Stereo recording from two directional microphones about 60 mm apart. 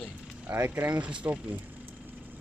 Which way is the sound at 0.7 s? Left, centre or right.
Right.